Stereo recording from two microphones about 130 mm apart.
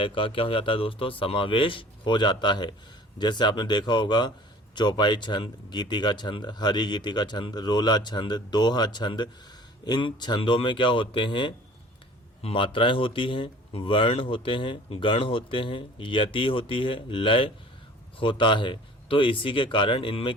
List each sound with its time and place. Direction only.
0.0 s speech: 40° left (ahead or behind)